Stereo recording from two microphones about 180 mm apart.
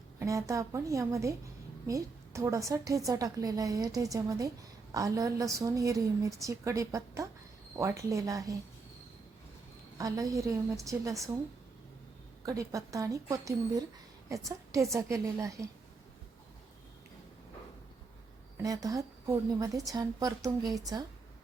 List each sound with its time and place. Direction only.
0.2 s a woman's voice: 15° right (ahead or behind)
10.0 s a woman's voice: 20° right (ahead or behind)
12.5 s a woman's voice: 20° right (ahead or behind)
18.6 s a woman's voice: 20° right (ahead or behind)